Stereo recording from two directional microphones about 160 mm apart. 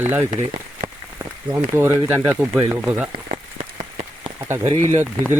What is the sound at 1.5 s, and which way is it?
Speech, 15° right (ahead or behind).